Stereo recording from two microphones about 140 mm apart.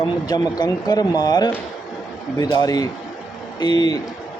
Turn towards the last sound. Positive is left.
turn(degrees=30)  # may be behind; listen again after turning